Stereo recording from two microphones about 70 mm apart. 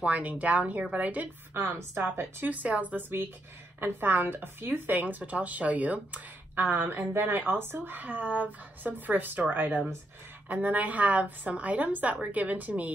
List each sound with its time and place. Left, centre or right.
0.0 s a woman's voice: right
1.5 s a woman's voice: right
2.4 s a woman's voice: right